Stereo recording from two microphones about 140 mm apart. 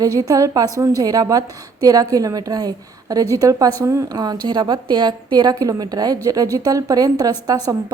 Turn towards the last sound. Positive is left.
turn(degrees=-25)  # may be behind; listen again after turning